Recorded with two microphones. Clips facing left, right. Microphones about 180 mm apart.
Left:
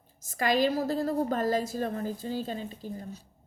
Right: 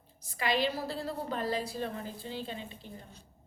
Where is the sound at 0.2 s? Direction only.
45° left (ahead or behind).